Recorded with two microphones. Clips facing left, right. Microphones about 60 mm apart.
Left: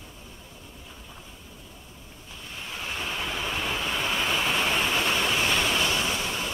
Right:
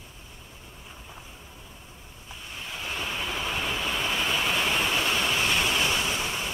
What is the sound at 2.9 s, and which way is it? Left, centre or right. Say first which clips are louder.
Vehicle: even; right.